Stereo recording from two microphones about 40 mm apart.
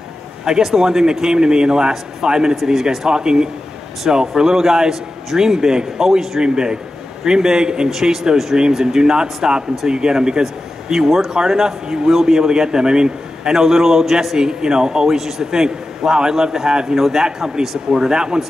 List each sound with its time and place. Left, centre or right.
0.5 s a man's voice: centre
8.5 s a man's voice: centre